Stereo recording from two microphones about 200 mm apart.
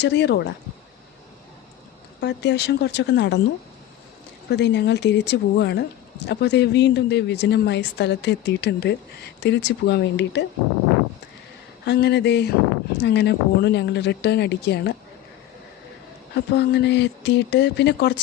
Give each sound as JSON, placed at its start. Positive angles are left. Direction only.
{"t": 0.0, "sound": "speech", "side_deg": 60}
{"t": 2.2, "sound": "speech", "side_deg": 60}
{"t": 4.4, "sound": "speech", "side_deg": 60}
{"t": 11.9, "sound": "speech", "side_deg": 55}
{"t": 16.3, "sound": "speech", "side_deg": 60}